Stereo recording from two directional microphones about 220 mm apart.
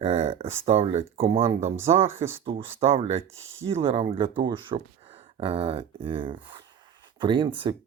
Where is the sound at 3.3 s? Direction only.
60° right (ahead or behind).